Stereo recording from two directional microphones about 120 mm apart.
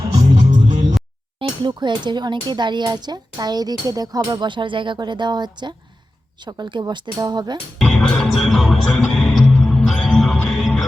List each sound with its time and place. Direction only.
0.5 s music: 90° right
1.4 s speech: 40° right (ahead or behind)
7.8 s music: 5° left (ahead or behind)